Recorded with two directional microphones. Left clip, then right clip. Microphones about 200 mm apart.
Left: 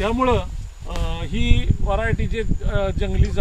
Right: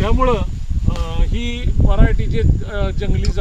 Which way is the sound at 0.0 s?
20° left (ahead or behind).